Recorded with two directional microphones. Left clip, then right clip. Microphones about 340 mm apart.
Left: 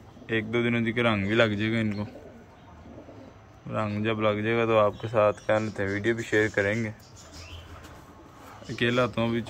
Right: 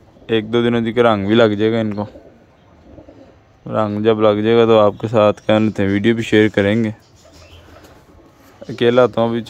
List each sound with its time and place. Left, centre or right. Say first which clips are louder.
0.3 s speech: right 11 dB; centre
3.7 s speech: right 13 dB; centre
8.6 s speech: right 13 dB; centre